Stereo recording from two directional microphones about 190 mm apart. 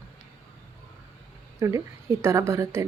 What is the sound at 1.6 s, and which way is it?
Speech, 15° right (ahead or behind).